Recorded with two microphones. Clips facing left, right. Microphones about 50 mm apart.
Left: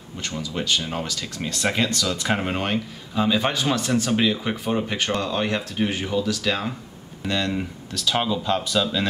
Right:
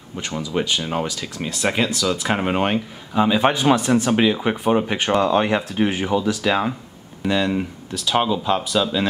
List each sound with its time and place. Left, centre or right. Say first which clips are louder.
0.4 s speech: right 3 dB; centre